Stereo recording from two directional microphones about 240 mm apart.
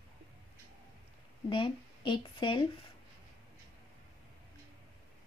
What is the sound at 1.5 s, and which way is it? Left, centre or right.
Speech, centre.